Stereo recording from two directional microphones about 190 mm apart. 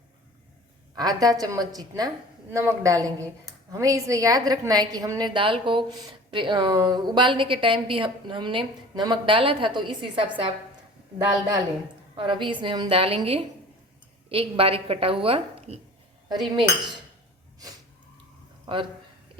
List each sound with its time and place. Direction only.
0.9 s a woman's voice: 20° right (ahead or behind)
12.1 s a woman's voice: 25° right (ahead or behind)
18.6 s speech: 25° right (ahead or behind)